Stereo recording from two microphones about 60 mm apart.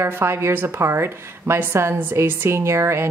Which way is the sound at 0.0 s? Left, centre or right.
Right.